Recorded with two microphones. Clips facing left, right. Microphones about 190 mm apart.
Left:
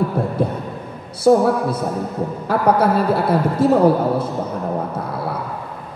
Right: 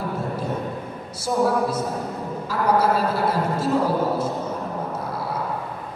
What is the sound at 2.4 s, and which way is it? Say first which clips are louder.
A man's voice: left 4 dB; 60° left (ahead or behind).